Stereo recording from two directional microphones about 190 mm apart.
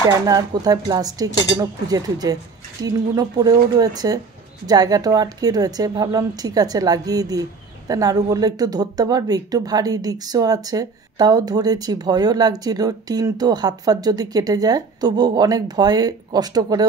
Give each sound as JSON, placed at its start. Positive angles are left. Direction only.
{"t": 0.2, "sound": "speech", "side_deg": -20}